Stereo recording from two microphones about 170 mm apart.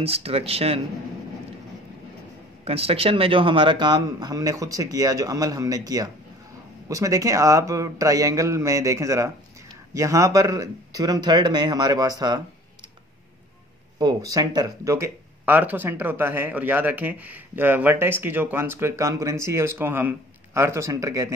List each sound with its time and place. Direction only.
0.0 s speech: 35° right (ahead or behind)
2.6 s a man's voice: 35° right (ahead or behind)
13.9 s speech: 20° right (ahead or behind)